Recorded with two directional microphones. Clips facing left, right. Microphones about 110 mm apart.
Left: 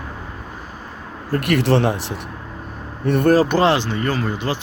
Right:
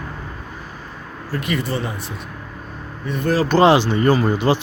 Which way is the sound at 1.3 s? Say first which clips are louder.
Left 6 dB; 65° left (ahead or behind).